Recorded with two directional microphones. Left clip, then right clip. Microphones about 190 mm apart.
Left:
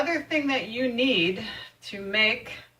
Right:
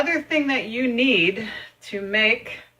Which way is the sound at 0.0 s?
45° right (ahead or behind).